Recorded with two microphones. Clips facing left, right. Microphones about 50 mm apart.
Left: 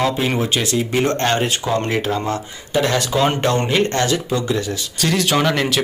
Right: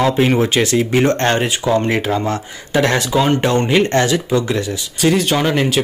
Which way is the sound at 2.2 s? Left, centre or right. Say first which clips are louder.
Right 2 dB; right.